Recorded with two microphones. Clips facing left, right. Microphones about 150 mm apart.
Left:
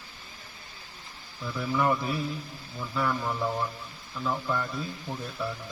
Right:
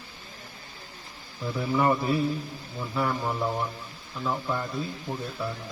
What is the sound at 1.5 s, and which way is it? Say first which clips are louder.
Speech: right 2 dB; 30° right (ahead or behind).